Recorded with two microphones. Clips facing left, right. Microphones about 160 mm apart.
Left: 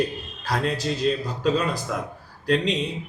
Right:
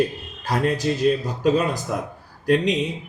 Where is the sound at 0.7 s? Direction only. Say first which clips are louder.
Right 4 dB; 15° right (ahead or behind).